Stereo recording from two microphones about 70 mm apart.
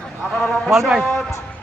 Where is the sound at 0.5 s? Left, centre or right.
Centre.